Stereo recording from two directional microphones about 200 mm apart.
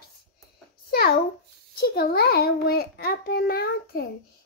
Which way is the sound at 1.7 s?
50° left (ahead or behind).